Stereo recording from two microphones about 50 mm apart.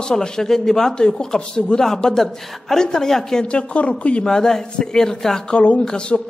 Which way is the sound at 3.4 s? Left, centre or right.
Left.